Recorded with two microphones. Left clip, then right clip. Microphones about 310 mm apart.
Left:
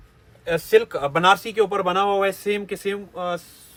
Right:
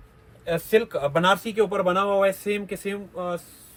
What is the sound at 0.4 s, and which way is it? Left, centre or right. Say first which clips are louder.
A man's voice: left 4 dB; left.